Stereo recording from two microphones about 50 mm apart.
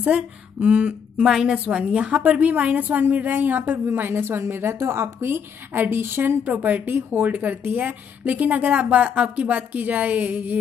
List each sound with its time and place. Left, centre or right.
0.0 s speech: right
1.2 s a woman's voice: centre
1.7 s a woman's voice: right
6.4 s a woman's voice: right